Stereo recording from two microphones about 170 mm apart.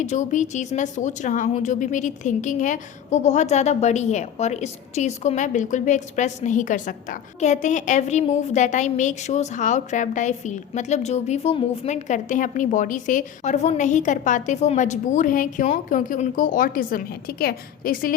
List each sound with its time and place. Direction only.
0.0 s a woman's voice: 45° left (ahead or behind)